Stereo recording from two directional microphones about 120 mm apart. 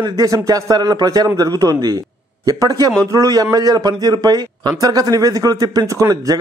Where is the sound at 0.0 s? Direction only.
30° right (ahead or behind).